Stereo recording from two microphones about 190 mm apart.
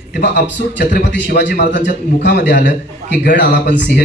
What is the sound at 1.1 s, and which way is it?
Speech, 60° left (ahead or behind).